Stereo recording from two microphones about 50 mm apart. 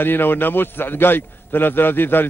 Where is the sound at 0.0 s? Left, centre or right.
Left.